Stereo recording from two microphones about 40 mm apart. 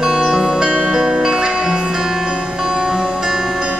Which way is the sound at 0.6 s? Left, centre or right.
Right.